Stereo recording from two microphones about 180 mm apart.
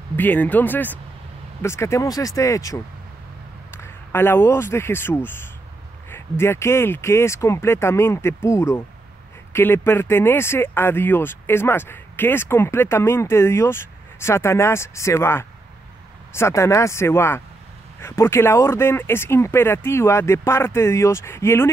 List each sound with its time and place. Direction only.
0.1 s speech: 10° left (ahead or behind)